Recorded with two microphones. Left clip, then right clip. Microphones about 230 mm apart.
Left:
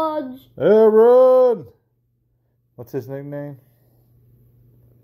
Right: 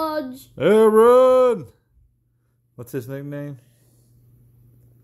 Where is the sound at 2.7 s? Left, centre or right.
Right.